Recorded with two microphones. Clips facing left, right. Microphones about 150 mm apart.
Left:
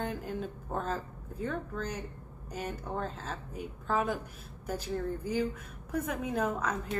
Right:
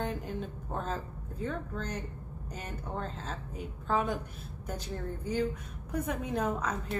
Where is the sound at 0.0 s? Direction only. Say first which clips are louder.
Even; centre (ahead or behind).